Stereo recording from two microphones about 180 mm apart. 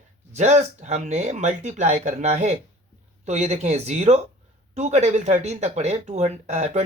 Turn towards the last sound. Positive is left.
turn(degrees=-35)  # may be behind; listen again after turning